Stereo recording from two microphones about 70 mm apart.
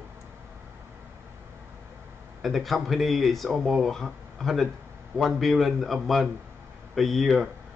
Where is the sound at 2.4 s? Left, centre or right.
Centre.